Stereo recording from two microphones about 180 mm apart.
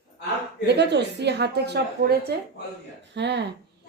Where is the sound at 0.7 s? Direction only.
70° right (ahead or behind).